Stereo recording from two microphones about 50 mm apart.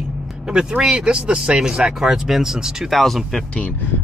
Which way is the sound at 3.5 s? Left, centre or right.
Left.